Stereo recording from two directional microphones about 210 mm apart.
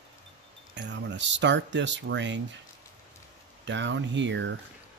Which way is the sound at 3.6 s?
60° right (ahead or behind).